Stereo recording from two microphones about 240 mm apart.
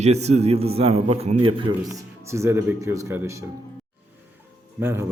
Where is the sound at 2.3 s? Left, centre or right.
Centre.